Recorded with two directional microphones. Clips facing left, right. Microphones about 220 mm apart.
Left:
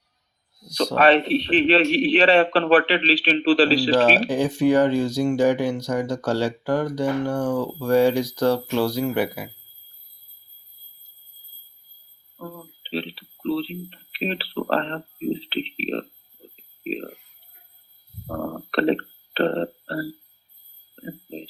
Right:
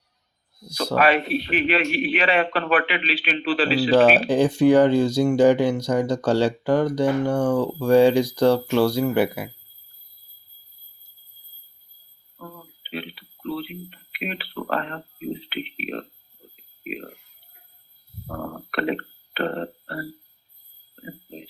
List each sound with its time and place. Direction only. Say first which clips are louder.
0.6 s speech: left 3 dB; 5° right (ahead or behind)
0.9 s a man's voice: left 2 dB; 30° left (ahead or behind)
3.9 s speech: right 3 dB; 10° right (ahead or behind)
12.4 s speech: left 4 dB; 35° left (ahead or behind)
16.6 s a sound: left 4 dB; 30° left (ahead or behind)
18.3 s speech: left 4 dB; 35° left (ahead or behind)